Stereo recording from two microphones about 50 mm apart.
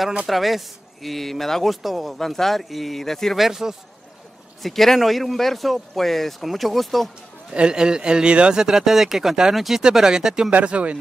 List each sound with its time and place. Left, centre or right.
0.3 s speech: centre
3.3 s speech: centre
7.5 s speech: centre
10.5 s speech: right